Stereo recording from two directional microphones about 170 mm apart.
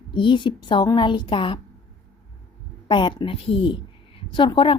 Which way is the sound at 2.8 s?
25° left (ahead or behind).